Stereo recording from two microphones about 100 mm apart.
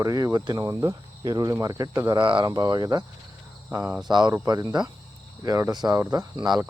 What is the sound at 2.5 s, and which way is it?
Speech, 40° right (ahead or behind).